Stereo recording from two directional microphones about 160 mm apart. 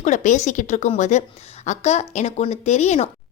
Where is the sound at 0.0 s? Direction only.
50° left (ahead or behind).